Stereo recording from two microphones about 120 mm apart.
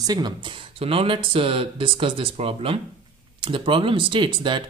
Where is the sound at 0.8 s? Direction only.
50° right (ahead or behind).